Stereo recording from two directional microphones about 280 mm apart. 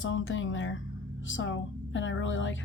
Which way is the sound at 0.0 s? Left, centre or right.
Left.